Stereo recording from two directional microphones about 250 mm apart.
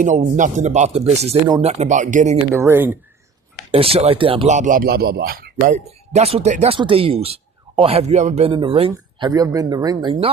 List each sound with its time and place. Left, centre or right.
0.0 s a man's voice: right
2.6 s speech: centre
3.7 s a man's voice: right